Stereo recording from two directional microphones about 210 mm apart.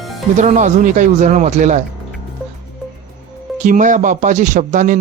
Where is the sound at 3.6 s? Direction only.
35° right (ahead or behind).